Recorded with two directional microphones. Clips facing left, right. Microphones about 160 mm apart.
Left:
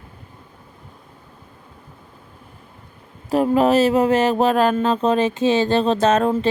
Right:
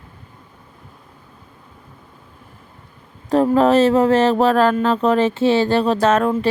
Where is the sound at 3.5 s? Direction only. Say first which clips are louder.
Right 1 dB; 10° left (ahead or behind).